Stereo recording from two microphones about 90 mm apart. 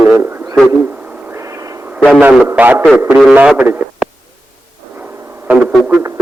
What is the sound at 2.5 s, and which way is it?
A man's voice, 20° right (ahead or behind).